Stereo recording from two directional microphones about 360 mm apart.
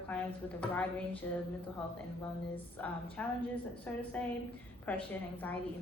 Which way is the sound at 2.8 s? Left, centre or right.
Centre.